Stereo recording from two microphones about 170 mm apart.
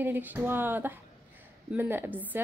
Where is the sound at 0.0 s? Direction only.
10° right (ahead or behind).